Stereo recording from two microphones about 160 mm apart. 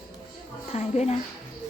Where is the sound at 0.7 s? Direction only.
45° left (ahead or behind).